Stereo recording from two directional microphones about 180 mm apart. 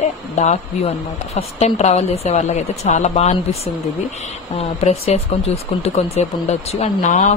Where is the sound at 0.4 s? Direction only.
40° left (ahead or behind).